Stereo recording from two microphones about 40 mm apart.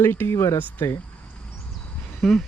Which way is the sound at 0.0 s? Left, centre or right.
Left.